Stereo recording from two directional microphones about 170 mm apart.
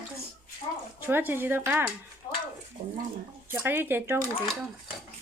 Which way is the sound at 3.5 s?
10° right (ahead or behind).